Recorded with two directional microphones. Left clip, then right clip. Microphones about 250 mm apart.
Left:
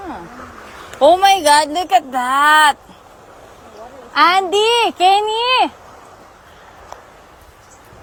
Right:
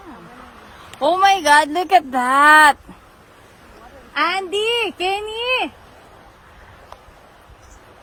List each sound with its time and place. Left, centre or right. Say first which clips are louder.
0.9 s speech: left 4 dB; centre
4.2 s a child's voice: left 7 dB; centre